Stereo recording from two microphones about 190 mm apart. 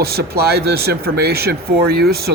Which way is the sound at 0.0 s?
55° right (ahead or behind).